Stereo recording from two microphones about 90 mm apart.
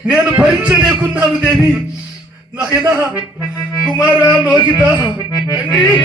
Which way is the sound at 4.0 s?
55° left (ahead or behind).